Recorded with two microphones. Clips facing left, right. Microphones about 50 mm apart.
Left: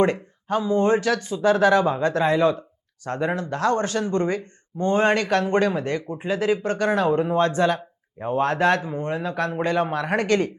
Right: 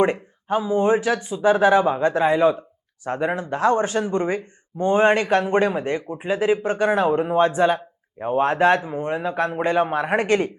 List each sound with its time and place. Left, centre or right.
0.0 s a man's voice: centre